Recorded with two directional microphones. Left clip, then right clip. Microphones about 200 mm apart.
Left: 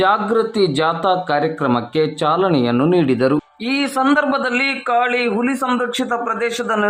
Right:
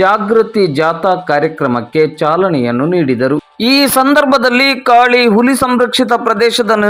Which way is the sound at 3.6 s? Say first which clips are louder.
Right 13 dB; 30° right (ahead or behind).